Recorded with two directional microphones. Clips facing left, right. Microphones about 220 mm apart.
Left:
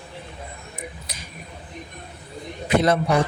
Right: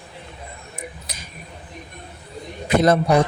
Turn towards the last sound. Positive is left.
turn(degrees=-40)  # may be behind; listen again after turning